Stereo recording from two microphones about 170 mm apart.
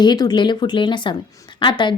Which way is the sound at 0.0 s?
25° left (ahead or behind).